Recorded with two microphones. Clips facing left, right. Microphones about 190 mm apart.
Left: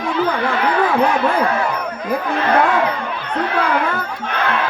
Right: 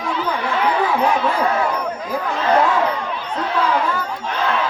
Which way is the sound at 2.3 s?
60° left (ahead or behind).